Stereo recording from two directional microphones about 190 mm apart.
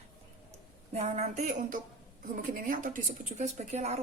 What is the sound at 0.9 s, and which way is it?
A woman's voice, 35° right (ahead or behind).